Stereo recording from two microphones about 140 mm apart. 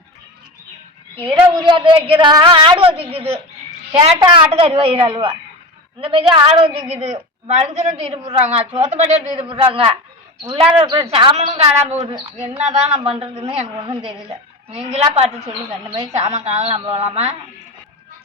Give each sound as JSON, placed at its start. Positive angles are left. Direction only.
{"t": 1.1, "sound": "a woman's voice", "side_deg": -35}
{"t": 9.5, "sound": "a woman's voice", "side_deg": -40}
{"t": 10.8, "sound": "a woman's voice", "side_deg": -25}
{"t": 11.3, "sound": "a woman's voice", "side_deg": -50}